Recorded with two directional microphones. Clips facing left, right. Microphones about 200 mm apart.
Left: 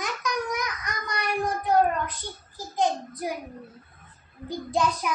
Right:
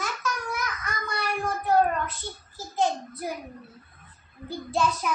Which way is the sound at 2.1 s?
15° left (ahead or behind).